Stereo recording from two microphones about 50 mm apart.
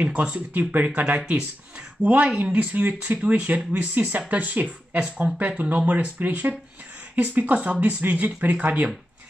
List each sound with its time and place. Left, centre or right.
0.0 s speech: right